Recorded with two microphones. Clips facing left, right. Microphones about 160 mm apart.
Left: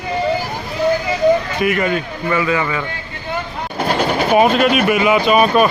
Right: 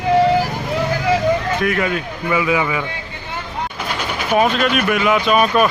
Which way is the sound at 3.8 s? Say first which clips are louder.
Left 11 dB; 40° left (ahead or behind).